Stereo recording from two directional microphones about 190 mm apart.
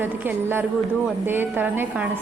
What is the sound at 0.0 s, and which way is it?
A woman's voice, 10° right (ahead or behind).